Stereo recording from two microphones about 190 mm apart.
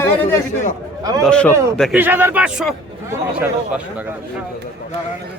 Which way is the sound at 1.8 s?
5° right (ahead or behind).